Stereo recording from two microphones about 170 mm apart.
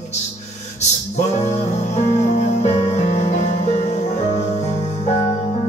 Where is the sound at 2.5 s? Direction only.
40° left (ahead or behind).